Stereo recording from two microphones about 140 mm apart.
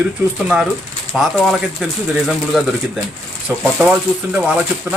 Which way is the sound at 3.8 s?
5° right (ahead or behind).